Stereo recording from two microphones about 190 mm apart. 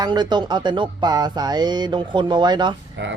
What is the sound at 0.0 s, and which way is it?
Music, 25° right (ahead or behind).